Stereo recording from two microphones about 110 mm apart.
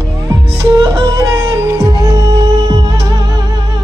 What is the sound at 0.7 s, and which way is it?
Music, 30° right (ahead or behind).